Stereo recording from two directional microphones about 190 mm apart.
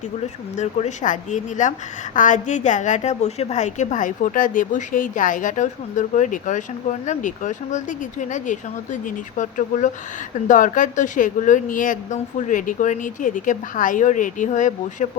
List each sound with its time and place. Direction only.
0.5 s a woman's voice: 40° left (ahead or behind)